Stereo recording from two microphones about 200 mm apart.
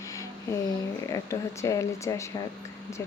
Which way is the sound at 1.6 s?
15° left (ahead or behind).